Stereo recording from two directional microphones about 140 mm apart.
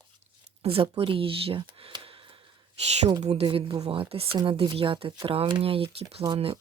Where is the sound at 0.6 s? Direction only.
45° right (ahead or behind).